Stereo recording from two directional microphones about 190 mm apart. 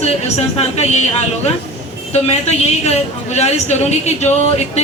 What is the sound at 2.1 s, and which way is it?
A woman's voice, 35° left (ahead or behind).